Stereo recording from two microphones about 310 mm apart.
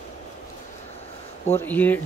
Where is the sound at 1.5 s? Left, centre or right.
Centre.